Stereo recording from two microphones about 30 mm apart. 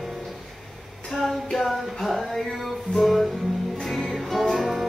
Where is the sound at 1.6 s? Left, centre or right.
Centre.